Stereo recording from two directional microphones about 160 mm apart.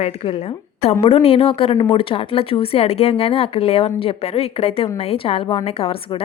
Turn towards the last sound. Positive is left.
turn(degrees=35)  # may be behind; listen again after turning